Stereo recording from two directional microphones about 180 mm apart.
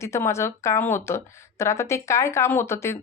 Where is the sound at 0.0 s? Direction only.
15° left (ahead or behind).